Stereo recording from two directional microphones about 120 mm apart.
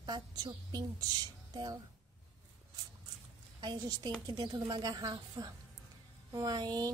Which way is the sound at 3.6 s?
35° right (ahead or behind).